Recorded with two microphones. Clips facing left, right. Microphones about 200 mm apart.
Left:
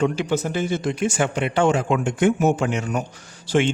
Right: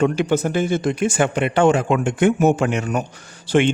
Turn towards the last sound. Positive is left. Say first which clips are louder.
# right 3 dB
turn(degrees=-60)  # may be behind; listen again after turning